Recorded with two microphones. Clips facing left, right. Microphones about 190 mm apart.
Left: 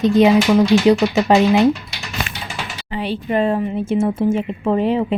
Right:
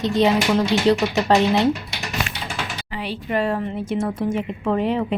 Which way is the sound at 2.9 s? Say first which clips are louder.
Left 7 dB; 25° left (ahead or behind).